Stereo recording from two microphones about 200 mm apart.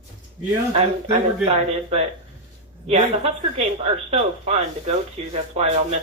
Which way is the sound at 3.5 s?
35° right (ahead or behind).